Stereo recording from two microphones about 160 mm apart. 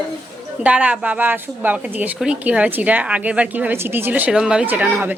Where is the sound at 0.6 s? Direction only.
10° right (ahead or behind).